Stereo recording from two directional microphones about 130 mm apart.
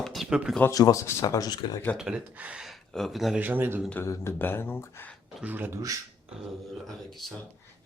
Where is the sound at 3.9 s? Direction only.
20° left (ahead or behind).